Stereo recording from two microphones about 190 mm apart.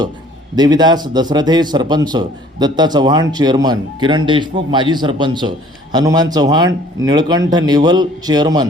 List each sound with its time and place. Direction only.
0.5 s a man's voice: 20° right (ahead or behind)